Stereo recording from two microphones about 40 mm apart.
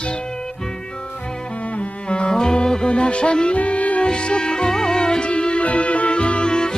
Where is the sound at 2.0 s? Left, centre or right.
Left.